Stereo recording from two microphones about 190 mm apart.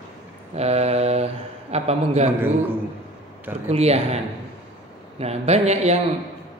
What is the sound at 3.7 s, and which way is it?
Speech, 35° right (ahead or behind).